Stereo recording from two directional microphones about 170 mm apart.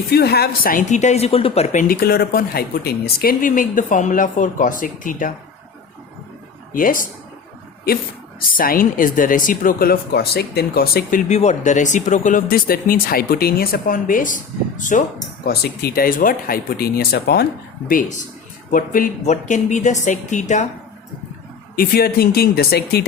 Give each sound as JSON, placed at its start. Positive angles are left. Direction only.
{"t": 0.1, "sound": "a woman's voice", "side_deg": 65}
{"t": 6.7, "sound": "a woman's voice", "side_deg": 55}
{"t": 8.5, "sound": "speech", "side_deg": 55}
{"t": 11.3, "sound": "a woman's voice", "side_deg": 40}
{"t": 15.4, "sound": "speech", "side_deg": 65}
{"t": 18.7, "sound": "a woman's voice", "side_deg": 50}
{"t": 21.8, "sound": "speech", "side_deg": 65}